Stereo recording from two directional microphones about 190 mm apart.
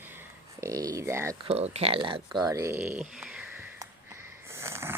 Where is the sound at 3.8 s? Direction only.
15° right (ahead or behind).